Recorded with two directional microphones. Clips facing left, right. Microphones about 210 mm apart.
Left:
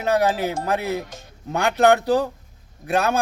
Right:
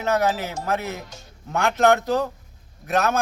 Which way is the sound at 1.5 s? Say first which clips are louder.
Left 2 dB; 35° left (ahead or behind).